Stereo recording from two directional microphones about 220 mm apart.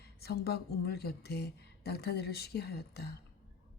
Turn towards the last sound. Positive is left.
turn(degrees=45)  # may be behind; listen again after turning